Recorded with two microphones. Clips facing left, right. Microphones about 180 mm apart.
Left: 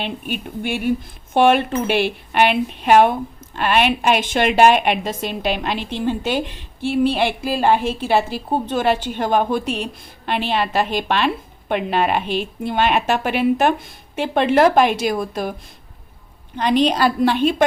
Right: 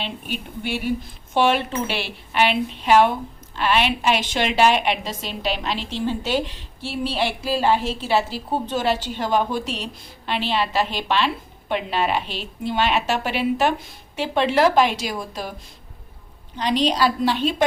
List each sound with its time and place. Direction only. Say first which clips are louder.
0.0 s speech: left 4 dB; 50° left (ahead or behind)
16.6 s a woman's voice: left 3 dB; 55° left (ahead or behind)